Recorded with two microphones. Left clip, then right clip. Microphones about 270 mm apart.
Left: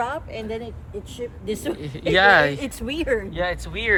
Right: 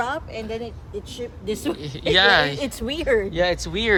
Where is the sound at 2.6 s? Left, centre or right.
Right.